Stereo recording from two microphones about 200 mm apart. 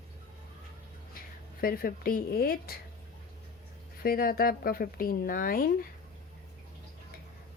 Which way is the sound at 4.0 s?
50° left (ahead or behind).